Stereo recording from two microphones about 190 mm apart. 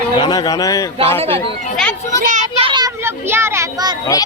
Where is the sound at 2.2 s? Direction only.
40° right (ahead or behind).